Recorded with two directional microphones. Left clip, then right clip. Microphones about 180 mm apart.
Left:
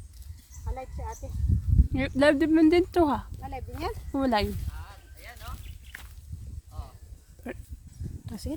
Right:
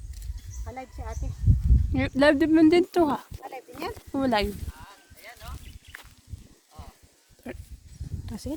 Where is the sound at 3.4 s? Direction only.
20° right (ahead or behind).